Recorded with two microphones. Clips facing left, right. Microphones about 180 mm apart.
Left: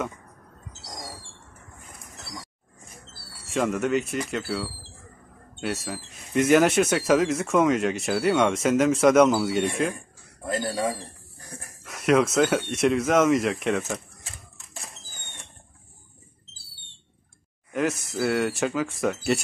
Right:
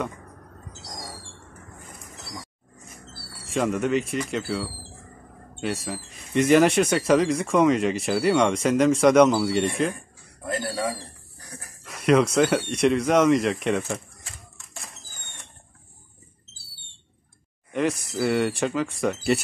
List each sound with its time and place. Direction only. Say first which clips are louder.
3.4 s speech: right 1 dB; centre (ahead or behind)
10.5 s speech: left 1 dB; 15° left (ahead or behind)
11.8 s speech: right 1 dB; centre (ahead or behind)
17.7 s speech: right 1 dB; centre (ahead or behind)